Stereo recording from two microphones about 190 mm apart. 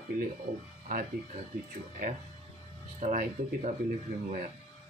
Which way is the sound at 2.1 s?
45° right (ahead or behind).